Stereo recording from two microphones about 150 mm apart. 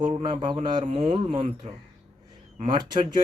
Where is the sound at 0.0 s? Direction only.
30° right (ahead or behind).